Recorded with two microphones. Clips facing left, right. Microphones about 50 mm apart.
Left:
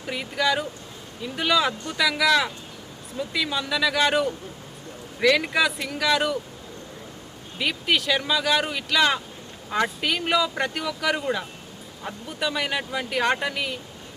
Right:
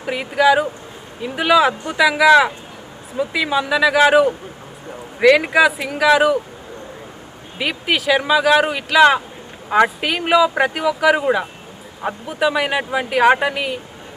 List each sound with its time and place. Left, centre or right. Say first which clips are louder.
0.1 s a man's voice: right 9 dB; centre
5.5 s speech: right 8 dB; centre
7.6 s speech: right 4 dB; centre
12.3 s speech: right 8 dB; centre